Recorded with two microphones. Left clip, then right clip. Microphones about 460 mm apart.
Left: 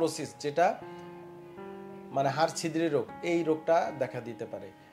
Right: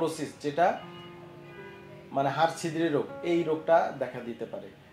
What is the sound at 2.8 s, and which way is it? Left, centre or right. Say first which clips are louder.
Speech: even; left.